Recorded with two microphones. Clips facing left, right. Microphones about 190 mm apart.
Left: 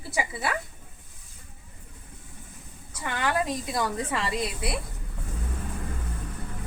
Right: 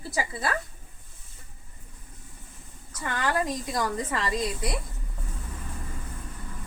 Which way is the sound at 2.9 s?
15° left (ahead or behind).